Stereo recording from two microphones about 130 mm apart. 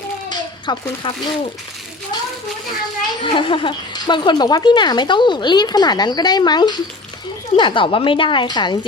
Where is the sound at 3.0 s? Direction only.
35° left (ahead or behind).